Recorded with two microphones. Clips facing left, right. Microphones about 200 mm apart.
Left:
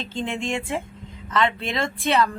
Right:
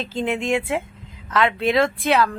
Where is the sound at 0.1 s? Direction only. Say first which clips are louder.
Right 5 dB; 5° right (ahead or behind).